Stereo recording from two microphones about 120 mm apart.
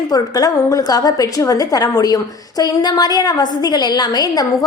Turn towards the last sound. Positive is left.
turn(degrees=35)  # may be behind; listen again after turning